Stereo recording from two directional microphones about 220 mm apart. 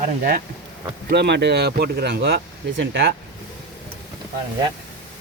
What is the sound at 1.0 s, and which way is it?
Speech, 50° right (ahead or behind).